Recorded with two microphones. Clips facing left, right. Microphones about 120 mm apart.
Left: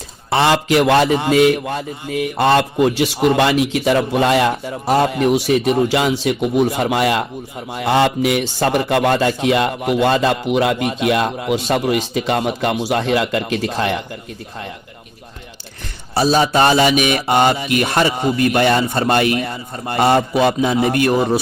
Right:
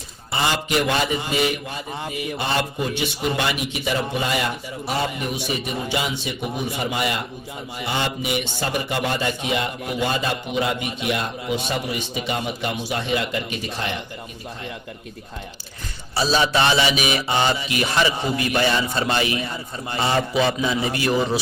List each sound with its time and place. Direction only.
0.3 s a man's voice: 85° left
16.1 s a man's voice: 50° left (ahead or behind)